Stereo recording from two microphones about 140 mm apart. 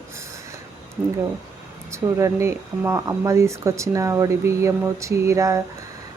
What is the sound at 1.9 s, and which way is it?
Speech, 20° right (ahead or behind).